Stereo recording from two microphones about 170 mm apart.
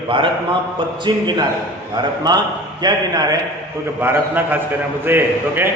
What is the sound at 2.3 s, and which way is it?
A man's voice, 25° right (ahead or behind).